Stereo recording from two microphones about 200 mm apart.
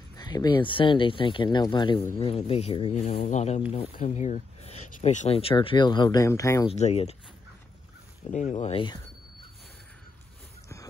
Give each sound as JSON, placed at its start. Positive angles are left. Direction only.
{"t": 0.1, "sound": "speech", "side_deg": 20}
{"t": 6.7, "sound": "speech", "side_deg": 30}
{"t": 8.3, "sound": "speech", "side_deg": 35}